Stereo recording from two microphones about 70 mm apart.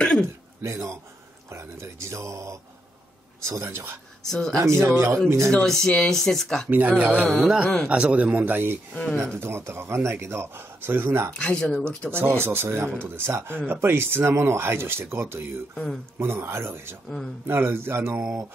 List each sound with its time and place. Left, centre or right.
0.0 s throat clearing: centre
0.6 s a man's voice: right
4.3 s speech: centre
4.8 s speech: right
5.5 s speech: centre
6.7 s a man's voice: right
9.4 s a man's voice: right
11.3 s speech: centre
12.1 s speech: right
15.7 s speech: centre
16.2 s speech: right
18.1 s a man's voice: centre